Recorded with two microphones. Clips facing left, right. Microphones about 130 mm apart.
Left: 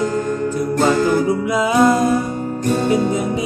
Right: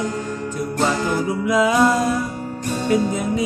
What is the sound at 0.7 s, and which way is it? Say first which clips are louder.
Music: left 5 dB; 40° left (ahead or behind).